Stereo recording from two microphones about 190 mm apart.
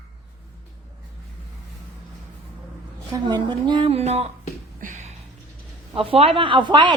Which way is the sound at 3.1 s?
25° right (ahead or behind).